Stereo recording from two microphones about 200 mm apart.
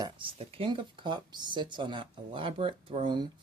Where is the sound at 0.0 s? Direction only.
25° right (ahead or behind).